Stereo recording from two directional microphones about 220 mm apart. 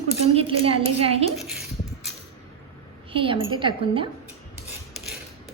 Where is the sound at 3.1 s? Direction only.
25° right (ahead or behind).